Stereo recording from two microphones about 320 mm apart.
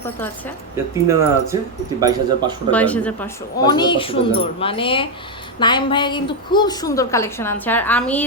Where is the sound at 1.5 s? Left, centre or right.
Centre.